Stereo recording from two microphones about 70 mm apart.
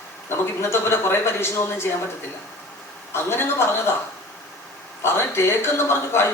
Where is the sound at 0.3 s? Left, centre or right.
Left.